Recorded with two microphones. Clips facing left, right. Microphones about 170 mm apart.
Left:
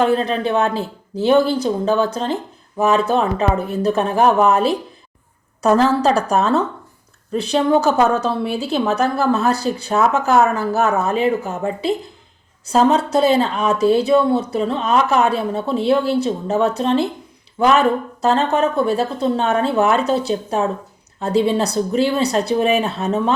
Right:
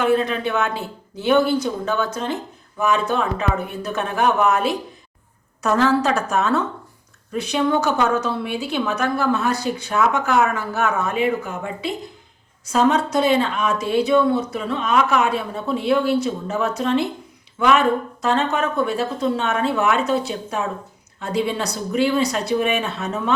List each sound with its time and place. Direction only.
0.0 s speech: 35° left (ahead or behind)